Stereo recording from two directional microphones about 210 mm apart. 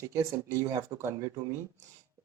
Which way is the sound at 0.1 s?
15° right (ahead or behind).